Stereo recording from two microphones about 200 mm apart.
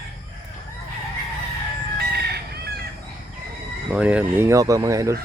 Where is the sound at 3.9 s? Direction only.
5° right (ahead or behind).